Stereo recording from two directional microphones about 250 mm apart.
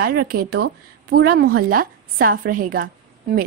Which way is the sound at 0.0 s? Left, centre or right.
Right.